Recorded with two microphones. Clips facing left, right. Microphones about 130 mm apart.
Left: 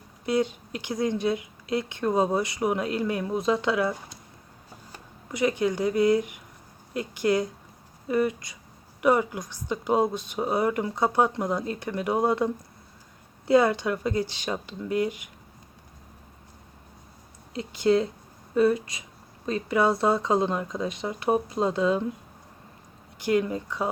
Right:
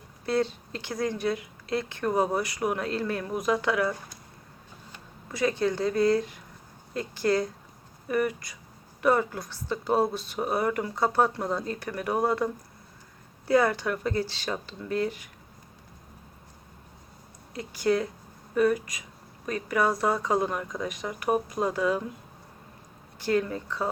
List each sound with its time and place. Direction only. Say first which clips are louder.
0.3 s speech: left 1 dB; 15° left (ahead or behind)
5.3 s speech: left 1 dB; 20° left (ahead or behind)
13.5 s speech: left 3 dB; 20° left (ahead or behind)
17.5 s speech: left 3 dB; 25° left (ahead or behind)
23.1 s speech: left 2 dB; 15° left (ahead or behind)